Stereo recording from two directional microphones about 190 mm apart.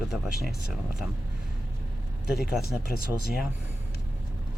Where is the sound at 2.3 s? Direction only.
55° left (ahead or behind).